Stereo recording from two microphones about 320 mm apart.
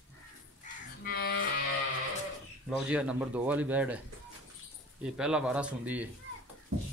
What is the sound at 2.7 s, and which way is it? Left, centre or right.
Speech, centre.